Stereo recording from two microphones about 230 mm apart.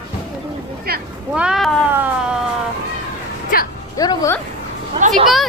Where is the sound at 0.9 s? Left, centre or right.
Right.